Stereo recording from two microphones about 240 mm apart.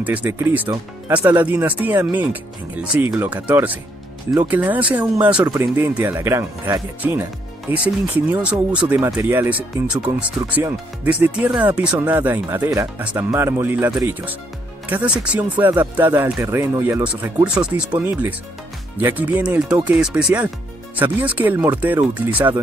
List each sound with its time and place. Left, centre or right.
0.0 s speech: centre